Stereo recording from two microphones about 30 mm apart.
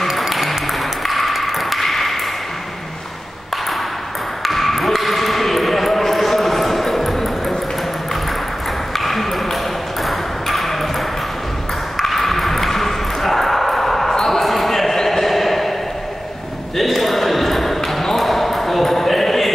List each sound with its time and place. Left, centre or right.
0.1 s ping: centre
4.5 s basketball bounce: centre
8.9 s ping: centre
12.0 s ping: centre
14.1 s basketball bounce: centre
14.4 s basketball bounce: centre
15.0 s a sound: centre
16.7 s ping: centre